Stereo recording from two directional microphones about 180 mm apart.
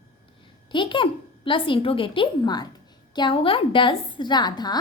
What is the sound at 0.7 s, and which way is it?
A child's voice, 25° left (ahead or behind).